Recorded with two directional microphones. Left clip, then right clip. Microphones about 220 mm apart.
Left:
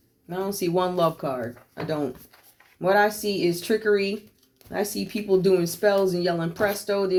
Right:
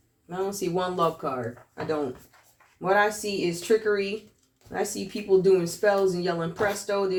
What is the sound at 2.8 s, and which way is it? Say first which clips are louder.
Speech: left 2 dB; 50° left (ahead or behind).